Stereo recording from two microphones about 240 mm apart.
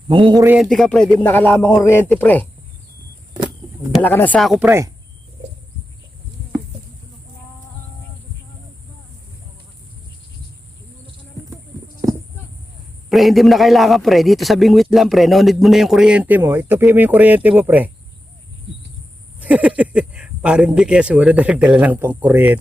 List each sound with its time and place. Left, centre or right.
0.3 s a man's voice: centre
0.5 s a man's voice: centre
3.9 s a man's voice: centre
13.1 s a man's voice: centre
19.4 s a man's voice: centre